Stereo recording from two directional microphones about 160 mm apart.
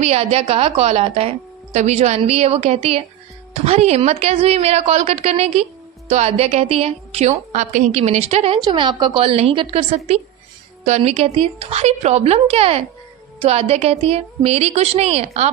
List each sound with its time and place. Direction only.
0.0 s a woman's voice: 40° right (ahead or behind)
8.6 s a woman's voice: 30° right (ahead or behind)